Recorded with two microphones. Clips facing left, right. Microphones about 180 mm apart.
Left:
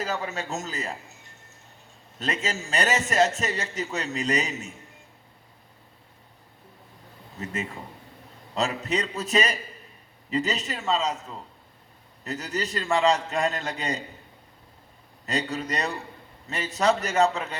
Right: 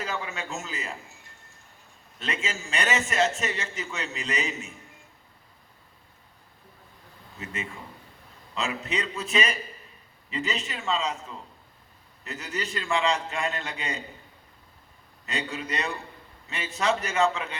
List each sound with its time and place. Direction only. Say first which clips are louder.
0.0 s a man's voice: left 3 dB; 40° left (ahead or behind)
2.1 s a man's voice: left 3 dB; 40° left (ahead or behind)
7.3 s a man's voice: left 4 dB; 40° left (ahead or behind)
12.2 s a man's voice: left 4 dB; 40° left (ahead or behind)
15.3 s a man's voice: left 4 dB; 40° left (ahead or behind)